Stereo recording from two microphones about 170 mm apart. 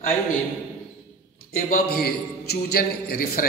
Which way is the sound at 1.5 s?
60° left (ahead or behind).